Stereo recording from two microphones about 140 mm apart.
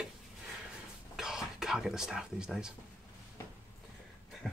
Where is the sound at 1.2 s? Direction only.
5° right (ahead or behind).